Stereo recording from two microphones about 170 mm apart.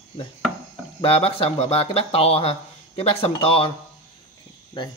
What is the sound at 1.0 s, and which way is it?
Speech, 35° left (ahead or behind).